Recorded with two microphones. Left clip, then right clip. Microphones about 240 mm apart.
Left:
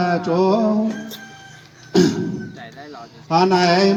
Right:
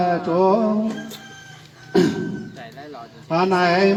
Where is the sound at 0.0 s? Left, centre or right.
Left.